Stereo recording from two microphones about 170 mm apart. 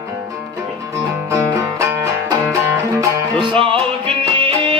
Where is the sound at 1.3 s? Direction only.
15° right (ahead or behind).